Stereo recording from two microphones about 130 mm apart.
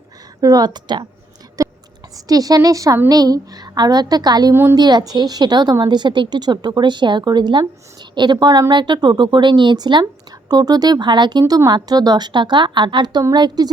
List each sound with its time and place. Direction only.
0.4 s speech: 30° right (ahead or behind)
1.6 s whispering: 25° right (ahead or behind)
2.1 s a woman's voice: 30° right (ahead or behind)
4.5 s a woman's voice: 20° right (ahead or behind)
4.8 s speech: 35° right (ahead or behind)